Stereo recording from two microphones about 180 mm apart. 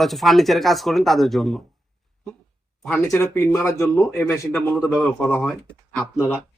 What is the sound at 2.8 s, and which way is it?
Speech, 10° left (ahead or behind).